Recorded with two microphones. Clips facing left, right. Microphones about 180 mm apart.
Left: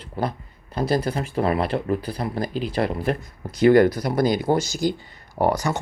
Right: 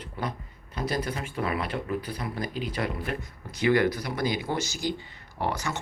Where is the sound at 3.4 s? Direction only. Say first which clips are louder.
Left 8 dB; 45° left (ahead or behind).